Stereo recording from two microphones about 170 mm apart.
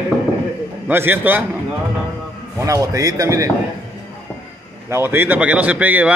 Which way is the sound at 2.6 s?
20° right (ahead or behind).